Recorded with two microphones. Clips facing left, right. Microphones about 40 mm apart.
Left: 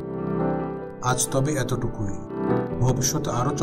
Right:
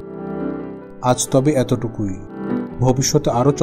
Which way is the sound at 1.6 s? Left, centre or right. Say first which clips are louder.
Right 6 dB; right.